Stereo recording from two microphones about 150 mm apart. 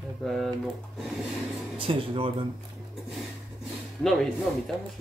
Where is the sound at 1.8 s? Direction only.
35° right (ahead or behind).